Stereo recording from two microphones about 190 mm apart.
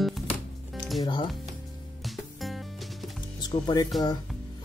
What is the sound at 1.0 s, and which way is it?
Music, 25° left (ahead or behind).